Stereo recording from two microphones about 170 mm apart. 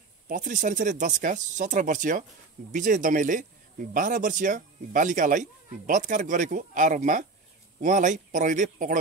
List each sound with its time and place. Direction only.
0.3 s speech: 50° right (ahead or behind)